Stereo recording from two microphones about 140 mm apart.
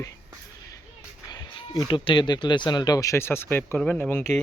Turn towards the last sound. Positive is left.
turn(degrees=15)  # may be behind; listen again after turning